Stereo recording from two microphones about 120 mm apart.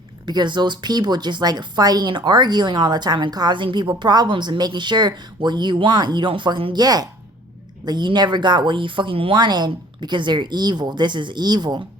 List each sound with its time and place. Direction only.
0.3 s a woman's voice: 40° right (ahead or behind)
6.8 s a woman's voice: 35° right (ahead or behind)